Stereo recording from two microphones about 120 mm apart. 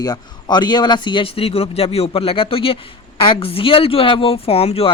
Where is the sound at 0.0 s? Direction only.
35° left (ahead or behind).